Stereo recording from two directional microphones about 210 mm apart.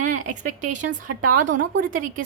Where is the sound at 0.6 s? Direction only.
35° right (ahead or behind).